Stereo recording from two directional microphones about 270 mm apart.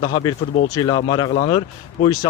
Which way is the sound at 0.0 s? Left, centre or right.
Centre.